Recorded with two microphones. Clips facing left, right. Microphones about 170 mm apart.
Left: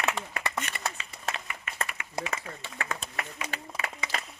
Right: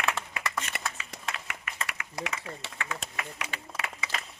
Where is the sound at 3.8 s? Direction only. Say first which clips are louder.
Left 1 dB; 75° right (ahead or behind).